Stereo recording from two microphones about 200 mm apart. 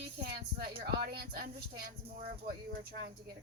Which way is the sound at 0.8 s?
55° right (ahead or behind).